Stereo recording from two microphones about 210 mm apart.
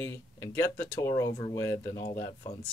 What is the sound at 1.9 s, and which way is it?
Speech, 40° left (ahead or behind).